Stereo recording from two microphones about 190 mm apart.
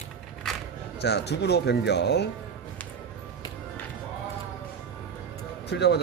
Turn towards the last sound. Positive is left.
turn(degrees=60)  # may be behind; listen again after turning